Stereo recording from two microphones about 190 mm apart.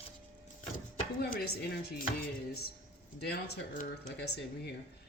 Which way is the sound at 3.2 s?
55° left (ahead or behind).